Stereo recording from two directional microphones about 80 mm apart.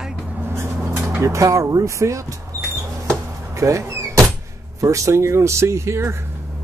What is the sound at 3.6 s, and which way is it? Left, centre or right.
Speech, right.